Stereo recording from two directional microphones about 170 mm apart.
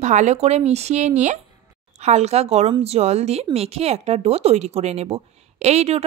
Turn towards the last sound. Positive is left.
turn(degrees=-40)  # may be behind; listen again after turning